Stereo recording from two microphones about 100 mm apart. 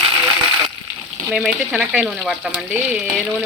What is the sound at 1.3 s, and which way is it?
Speech, 5° right (ahead or behind).